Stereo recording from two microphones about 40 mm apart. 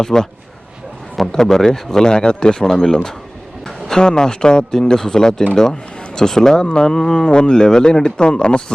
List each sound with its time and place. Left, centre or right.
0.0 s speech: centre